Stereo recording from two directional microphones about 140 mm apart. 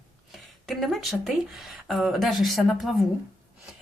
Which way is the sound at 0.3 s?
Centre (ahead or behind).